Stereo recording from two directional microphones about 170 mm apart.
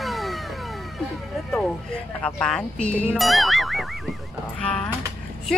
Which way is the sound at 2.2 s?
5° left (ahead or behind).